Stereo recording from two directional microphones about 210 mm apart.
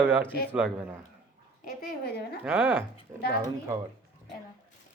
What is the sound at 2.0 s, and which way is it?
Speech, 50° left (ahead or behind).